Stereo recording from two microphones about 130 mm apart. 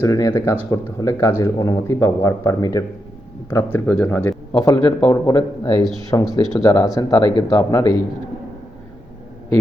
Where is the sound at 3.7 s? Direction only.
10° left (ahead or behind).